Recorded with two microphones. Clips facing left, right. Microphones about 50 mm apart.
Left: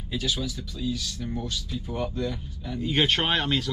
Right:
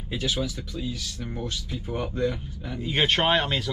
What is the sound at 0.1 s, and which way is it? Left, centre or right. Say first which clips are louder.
Speech: right 1 dB; right.